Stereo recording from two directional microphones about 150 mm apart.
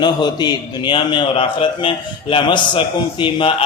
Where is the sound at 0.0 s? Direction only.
30° left (ahead or behind).